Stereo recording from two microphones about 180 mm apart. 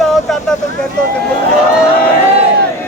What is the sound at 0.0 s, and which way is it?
Vehicle, centre (ahead or behind).